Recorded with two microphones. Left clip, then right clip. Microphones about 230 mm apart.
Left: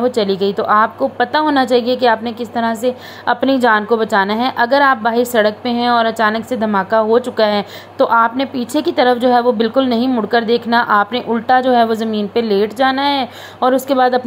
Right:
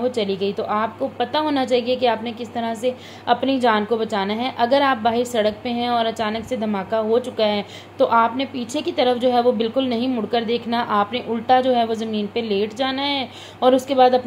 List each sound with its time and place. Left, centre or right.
0.0 s a woman's voice: left